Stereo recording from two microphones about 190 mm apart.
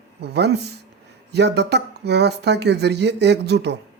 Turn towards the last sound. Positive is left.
turn(degrees=-65)  # may be behind; listen again after turning